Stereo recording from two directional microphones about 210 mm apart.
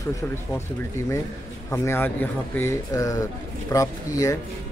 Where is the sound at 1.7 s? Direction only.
10° left (ahead or behind).